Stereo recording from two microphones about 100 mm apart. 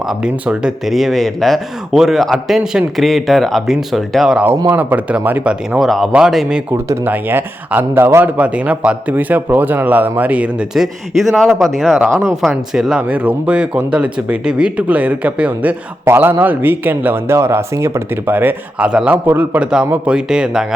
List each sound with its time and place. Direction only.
0.1 s speech: 10° right (ahead or behind)
4.7 s a man's voice: 15° right (ahead or behind)
6.7 s a man's voice: 25° right (ahead or behind)
10.8 s a man's voice: centre (ahead or behind); by 18.9 s 20° right (ahead or behind)
18.9 s a man's voice: 10° right (ahead or behind)
19.1 s a man's voice: 20° right (ahead or behind)